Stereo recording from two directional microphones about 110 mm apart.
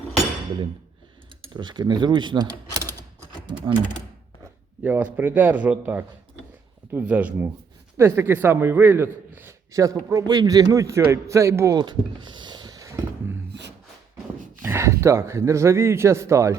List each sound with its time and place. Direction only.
1.5 s speech: 40° right (ahead or behind)
4.8 s a man's voice: 15° right (ahead or behind)
11.8 s a sound: 45° right (ahead or behind)
14.6 s a man's voice: 25° right (ahead or behind)